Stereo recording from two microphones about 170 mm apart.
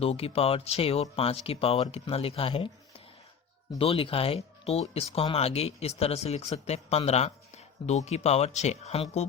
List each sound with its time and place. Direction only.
0.0 s speech: 35° left (ahead or behind)
3.8 s speech: 35° left (ahead or behind)